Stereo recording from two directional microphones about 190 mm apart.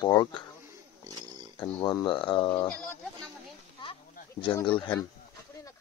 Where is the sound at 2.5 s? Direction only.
10° left (ahead or behind).